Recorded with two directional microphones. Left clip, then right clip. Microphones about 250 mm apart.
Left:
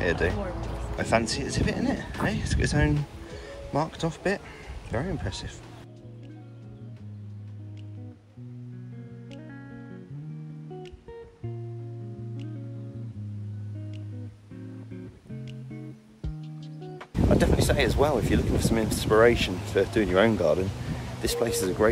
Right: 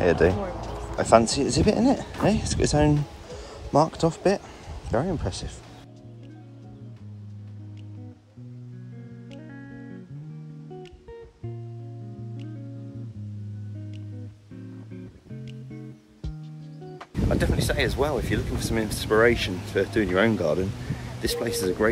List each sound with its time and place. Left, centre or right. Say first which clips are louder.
0.0 s speech: right 6 dB; centre
9.3 s music: right 2 dB; centre
15.0 s music: even; centre
17.3 s speech: left 2 dB; centre